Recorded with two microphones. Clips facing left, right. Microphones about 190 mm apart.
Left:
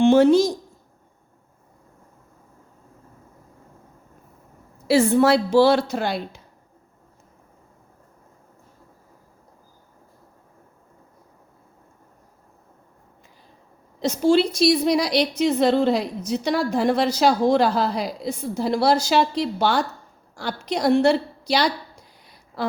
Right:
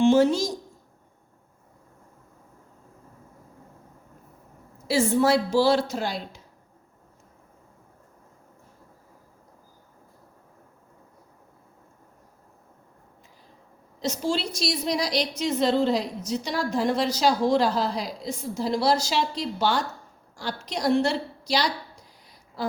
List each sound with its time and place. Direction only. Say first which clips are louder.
0.0 s a woman's voice: left 5 dB; 60° left (ahead or behind)
4.9 s a woman's voice: left 4 dB; 65° left (ahead or behind)
14.0 s a woman's voice: left 9 dB; 60° left (ahead or behind)